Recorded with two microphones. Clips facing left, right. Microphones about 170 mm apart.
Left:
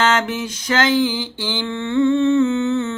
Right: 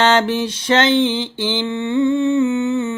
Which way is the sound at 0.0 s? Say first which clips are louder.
Right 4 dB; 30° right (ahead or behind).